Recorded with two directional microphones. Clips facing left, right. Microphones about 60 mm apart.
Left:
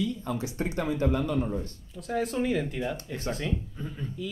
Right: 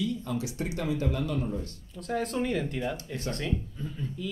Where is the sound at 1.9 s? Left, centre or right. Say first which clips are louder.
Left 1 dB; centre.